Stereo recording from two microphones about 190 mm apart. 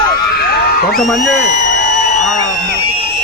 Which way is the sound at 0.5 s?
55° left (ahead or behind).